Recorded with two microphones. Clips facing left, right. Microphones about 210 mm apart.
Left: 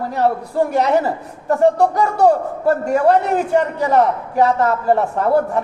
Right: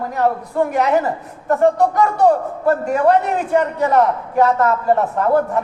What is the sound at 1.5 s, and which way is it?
Speech, 30° left (ahead or behind).